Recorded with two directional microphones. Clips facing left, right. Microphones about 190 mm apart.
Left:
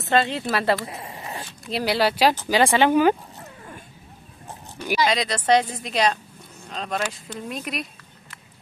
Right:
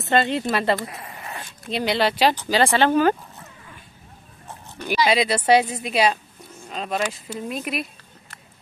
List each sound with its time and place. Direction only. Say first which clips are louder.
0.0 s speech: right 1 dB; centre (ahead or behind)
1.0 s zipper: left 2 dB; 25° left (ahead or behind)
1.7 s speech: even; 5° left (ahead or behind)
5.0 s a woman's voice: right 3 dB; 10° right (ahead or behind)